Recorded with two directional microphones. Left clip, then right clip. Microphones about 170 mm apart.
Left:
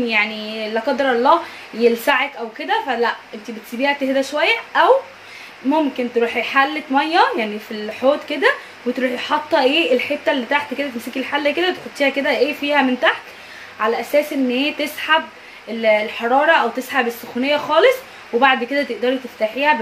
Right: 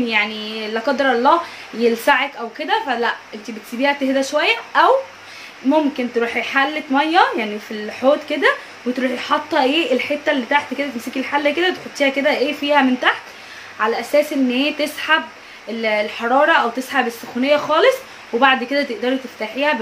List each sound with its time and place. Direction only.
0.0 s a woman's voice: 15° right (ahead or behind)